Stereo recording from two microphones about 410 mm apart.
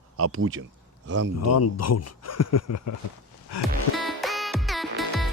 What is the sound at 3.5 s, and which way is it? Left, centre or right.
Music, left.